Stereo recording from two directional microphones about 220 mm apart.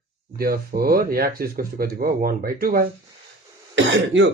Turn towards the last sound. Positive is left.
turn(degrees=-55)  # may be behind; listen again after turning